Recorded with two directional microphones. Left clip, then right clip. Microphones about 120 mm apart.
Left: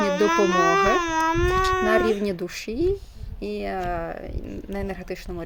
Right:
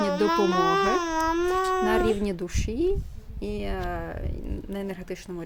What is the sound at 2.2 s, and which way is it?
Speech, 15° right (ahead or behind).